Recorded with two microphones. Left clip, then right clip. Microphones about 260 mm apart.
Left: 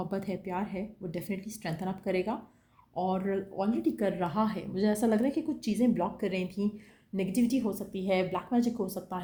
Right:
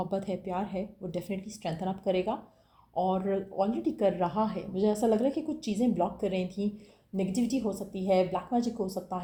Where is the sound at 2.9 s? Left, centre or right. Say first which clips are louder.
Right 2 dB; left.